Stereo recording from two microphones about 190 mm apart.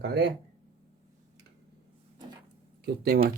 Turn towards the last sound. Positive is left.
turn(degrees=-55)  # may be behind; listen again after turning